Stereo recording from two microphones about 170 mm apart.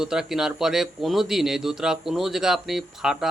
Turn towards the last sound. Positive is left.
turn(degrees=0)  # may be behind; listen again after turning